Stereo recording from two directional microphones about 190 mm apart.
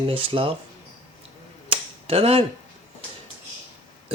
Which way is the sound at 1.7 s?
30° right (ahead or behind).